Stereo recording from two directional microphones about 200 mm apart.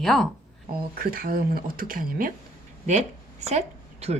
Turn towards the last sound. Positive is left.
turn(degrees=-35)  # may be behind; listen again after turning